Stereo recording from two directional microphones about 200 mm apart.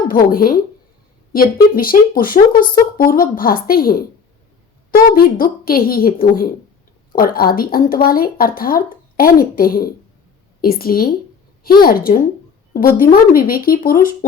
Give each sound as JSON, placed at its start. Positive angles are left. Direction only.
{"t": 0.1, "sound": "speech", "side_deg": 45}